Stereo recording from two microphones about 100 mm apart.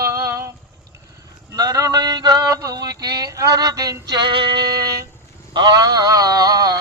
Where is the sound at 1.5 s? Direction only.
40° right (ahead or behind).